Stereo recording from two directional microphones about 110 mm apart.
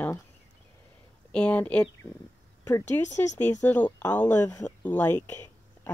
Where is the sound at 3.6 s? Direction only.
15° left (ahead or behind).